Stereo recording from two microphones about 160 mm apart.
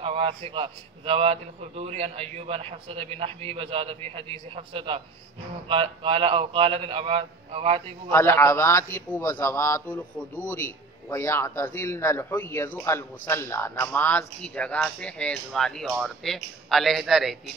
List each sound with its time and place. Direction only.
0.0 s a man's voice: 35° right (ahead or behind)
8.1 s a man's voice: 15° left (ahead or behind); by 17.4 s centre (ahead or behind)